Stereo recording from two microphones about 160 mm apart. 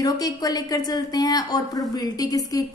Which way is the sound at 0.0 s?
25° left (ahead or behind).